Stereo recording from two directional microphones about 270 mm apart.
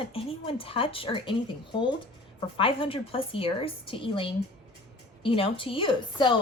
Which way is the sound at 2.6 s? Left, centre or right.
Centre.